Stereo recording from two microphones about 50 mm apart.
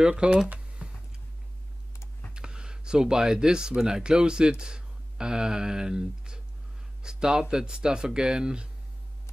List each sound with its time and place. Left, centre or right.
0.0 s speech: centre
0.5 s computer keyboard: right
2.3 s speech: centre